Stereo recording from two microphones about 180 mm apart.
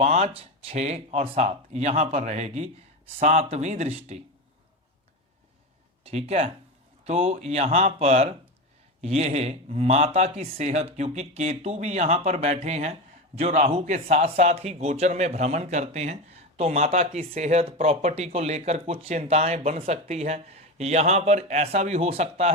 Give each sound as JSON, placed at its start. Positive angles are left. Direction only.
{"t": 0.0, "sound": "speech", "side_deg": -35}
{"t": 6.0, "sound": "speech", "side_deg": -35}